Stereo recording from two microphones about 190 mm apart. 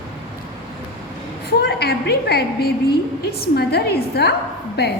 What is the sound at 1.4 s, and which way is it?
A woman's voice, 55° left (ahead or behind).